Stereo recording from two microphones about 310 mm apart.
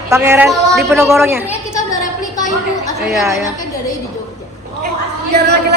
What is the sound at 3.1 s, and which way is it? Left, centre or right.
Speech, centre.